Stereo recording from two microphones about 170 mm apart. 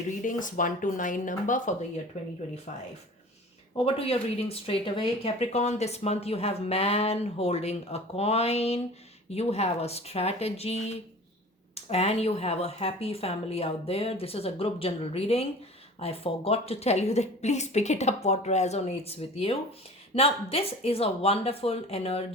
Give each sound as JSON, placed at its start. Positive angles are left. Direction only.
{"t": 0.2, "sound": "speech", "side_deg": 50}
{"t": 3.8, "sound": "speech", "side_deg": 35}